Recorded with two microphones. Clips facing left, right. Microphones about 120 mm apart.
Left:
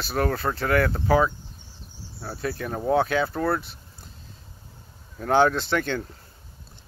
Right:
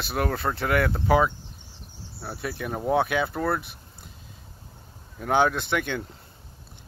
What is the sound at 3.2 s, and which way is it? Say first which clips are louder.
Speech: left 1 dB; centre (ahead or behind).